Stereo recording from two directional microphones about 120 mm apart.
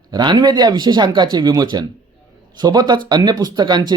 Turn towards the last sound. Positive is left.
turn(degrees=-35)  # may be behind; listen again after turning